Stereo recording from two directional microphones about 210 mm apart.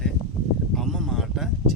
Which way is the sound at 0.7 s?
Centre (ahead or behind).